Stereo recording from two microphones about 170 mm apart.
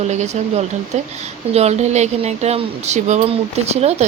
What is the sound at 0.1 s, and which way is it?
Speech, 40° right (ahead or behind).